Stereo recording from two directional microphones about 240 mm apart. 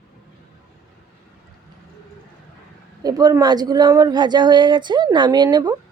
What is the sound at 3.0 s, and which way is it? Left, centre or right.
Speech, centre.